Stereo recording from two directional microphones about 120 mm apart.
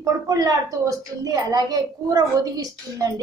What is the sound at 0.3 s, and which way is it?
A woman's voice, 30° right (ahead or behind).